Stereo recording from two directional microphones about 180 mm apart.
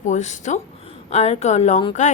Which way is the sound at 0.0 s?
40° left (ahead or behind).